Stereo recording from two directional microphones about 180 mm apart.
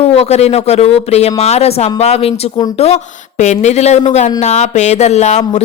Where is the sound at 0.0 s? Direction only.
35° left (ahead or behind).